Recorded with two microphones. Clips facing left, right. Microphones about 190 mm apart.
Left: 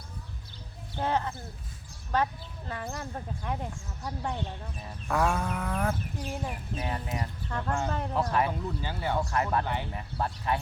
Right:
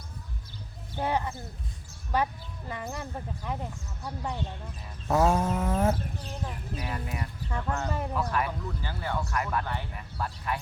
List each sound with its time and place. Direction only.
0.9 s speech: 10° right (ahead or behind)
3.4 s speech: centre (ahead or behind)
5.0 s livestock: 25° right (ahead or behind)
6.2 s speech: 15° left (ahead or behind)
6.9 s speech: 30° left (ahead or behind)
7.9 s speech: 5° right (ahead or behind)
8.1 s speech: 25° left (ahead or behind)
9.4 s speech: 30° left (ahead or behind)
9.6 s speech: 20° left (ahead or behind)